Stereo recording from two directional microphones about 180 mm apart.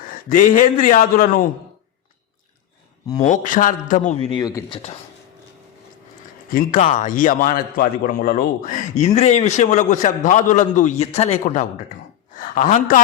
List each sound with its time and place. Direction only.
0.0 s a man's voice: 50° left (ahead or behind)
3.2 s a man's voice: 45° left (ahead or behind); by 4.8 s 20° left (ahead or behind)
6.5 s a man's voice: 50° left (ahead or behind)